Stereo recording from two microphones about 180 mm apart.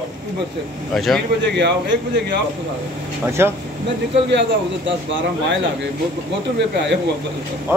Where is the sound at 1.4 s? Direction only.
75° right (ahead or behind).